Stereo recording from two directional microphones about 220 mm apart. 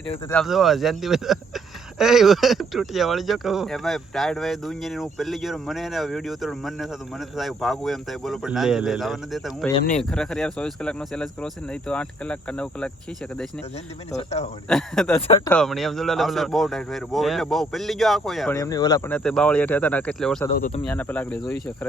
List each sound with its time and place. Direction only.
0.3 s speech: centre (ahead or behind)
14.1 s a man's voice: 30° left (ahead or behind)
14.7 s speech: centre (ahead or behind)
15.3 s a man's voice: 20° left (ahead or behind)
15.5 s speech: centre (ahead or behind)
18.5 s speech: 15° left (ahead or behind)